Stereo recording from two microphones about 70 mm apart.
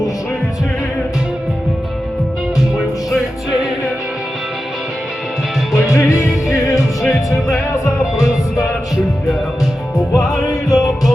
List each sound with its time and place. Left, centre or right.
3.1 s music: centre
5.7 s music: left
9.9 s music: left